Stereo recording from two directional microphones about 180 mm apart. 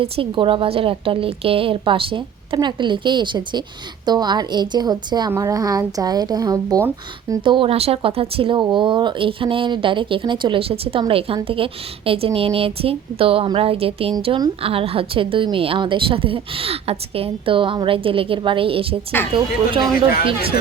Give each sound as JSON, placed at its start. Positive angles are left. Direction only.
{"t": 0.0, "sound": "a woman's voice", "side_deg": -30}